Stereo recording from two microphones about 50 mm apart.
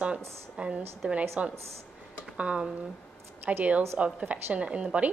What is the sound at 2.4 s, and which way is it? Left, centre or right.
A woman's voice, right.